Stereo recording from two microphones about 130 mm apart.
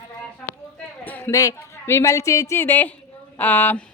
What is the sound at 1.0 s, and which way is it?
A woman's voice, 15° left (ahead or behind).